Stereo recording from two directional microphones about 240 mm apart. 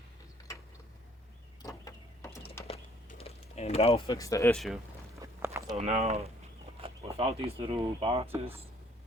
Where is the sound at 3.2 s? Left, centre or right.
Left.